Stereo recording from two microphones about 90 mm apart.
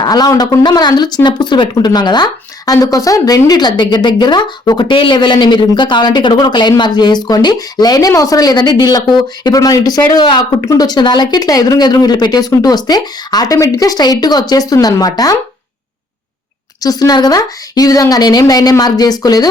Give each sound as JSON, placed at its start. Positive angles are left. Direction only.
{"t": 0.0, "sound": "a man's voice", "side_deg": 45}
{"t": 9.6, "sound": "speech", "side_deg": 40}
{"t": 16.8, "sound": "speech", "side_deg": 45}